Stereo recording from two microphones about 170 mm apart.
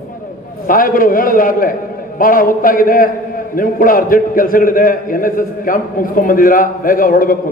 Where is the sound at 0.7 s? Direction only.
55° left (ahead or behind).